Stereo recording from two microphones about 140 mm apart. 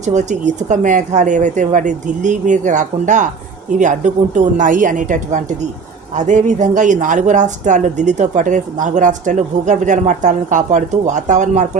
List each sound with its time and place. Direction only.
0.0 s speech: 60° right (ahead or behind)